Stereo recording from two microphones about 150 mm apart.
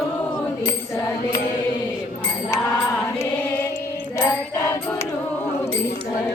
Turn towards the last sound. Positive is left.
turn(degrees=15)  # may be behind; listen again after turning